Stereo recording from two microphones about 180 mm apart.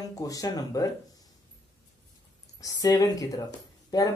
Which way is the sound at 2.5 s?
20° left (ahead or behind).